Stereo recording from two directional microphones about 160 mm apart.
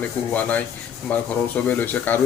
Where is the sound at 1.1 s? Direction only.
10° left (ahead or behind).